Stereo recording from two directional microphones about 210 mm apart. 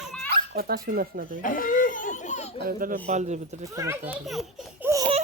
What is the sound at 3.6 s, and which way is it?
Speech, 15° right (ahead or behind).